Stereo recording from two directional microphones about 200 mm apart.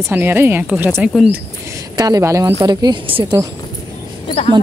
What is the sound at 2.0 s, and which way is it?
A woman's voice, 20° right (ahead or behind).